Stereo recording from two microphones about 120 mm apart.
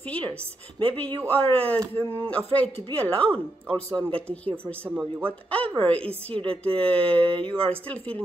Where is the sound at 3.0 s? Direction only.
10° left (ahead or behind).